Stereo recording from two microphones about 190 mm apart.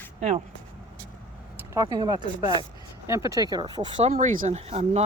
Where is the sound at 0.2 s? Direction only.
35° right (ahead or behind).